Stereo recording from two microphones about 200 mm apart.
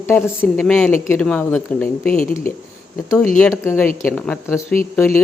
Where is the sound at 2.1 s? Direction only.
45° left (ahead or behind).